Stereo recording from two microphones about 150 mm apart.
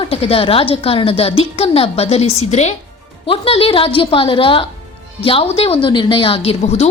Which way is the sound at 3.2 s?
35° left (ahead or behind).